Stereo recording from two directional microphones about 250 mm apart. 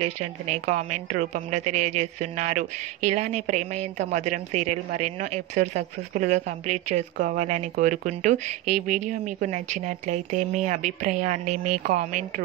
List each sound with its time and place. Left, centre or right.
0.2 s speech: right